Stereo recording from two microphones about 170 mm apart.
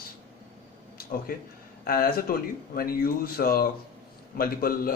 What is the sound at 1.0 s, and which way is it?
Speech, 60° left (ahead or behind).